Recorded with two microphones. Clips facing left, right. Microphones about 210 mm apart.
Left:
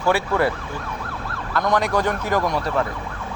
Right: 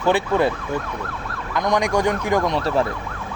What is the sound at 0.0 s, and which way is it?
Ambulance, 20° right (ahead or behind).